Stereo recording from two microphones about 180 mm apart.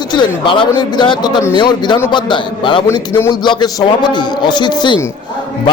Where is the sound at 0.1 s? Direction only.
25° left (ahead or behind).